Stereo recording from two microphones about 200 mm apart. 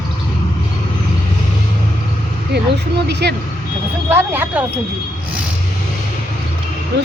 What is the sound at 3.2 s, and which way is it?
Vehicle, 55° right (ahead or behind).